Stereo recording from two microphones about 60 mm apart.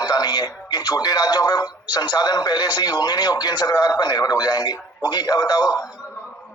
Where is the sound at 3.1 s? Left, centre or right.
Left.